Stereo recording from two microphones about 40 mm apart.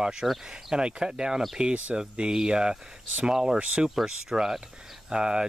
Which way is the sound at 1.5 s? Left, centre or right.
Right.